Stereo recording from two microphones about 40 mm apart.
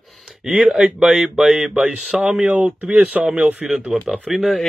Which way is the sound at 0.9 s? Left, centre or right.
Centre.